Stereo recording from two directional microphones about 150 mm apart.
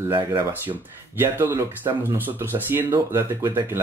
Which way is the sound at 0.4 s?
15° right (ahead or behind).